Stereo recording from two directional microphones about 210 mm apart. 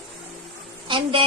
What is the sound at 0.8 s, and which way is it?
Speech, 25° right (ahead or behind).